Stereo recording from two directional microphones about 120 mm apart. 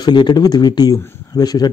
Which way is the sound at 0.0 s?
40° left (ahead or behind).